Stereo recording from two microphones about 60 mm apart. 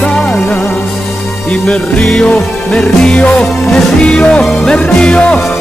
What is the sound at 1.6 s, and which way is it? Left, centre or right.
Music, centre.